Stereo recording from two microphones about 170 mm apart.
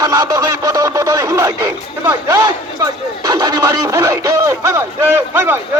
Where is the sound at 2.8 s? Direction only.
25° right (ahead or behind).